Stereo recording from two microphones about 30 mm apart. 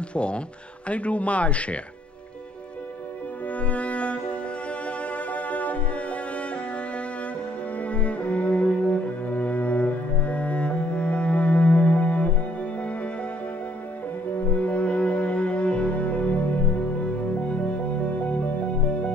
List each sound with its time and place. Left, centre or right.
0.1 s speech: left
0.8 s speech: left
3.5 s music: left
7.8 s cello: left
14.5 s music: left